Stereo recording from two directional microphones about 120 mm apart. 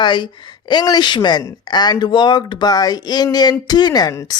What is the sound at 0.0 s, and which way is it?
Speech, 40° left (ahead or behind).